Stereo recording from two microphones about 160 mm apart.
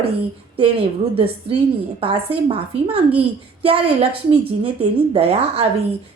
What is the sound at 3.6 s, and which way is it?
Speech, 35° right (ahead or behind).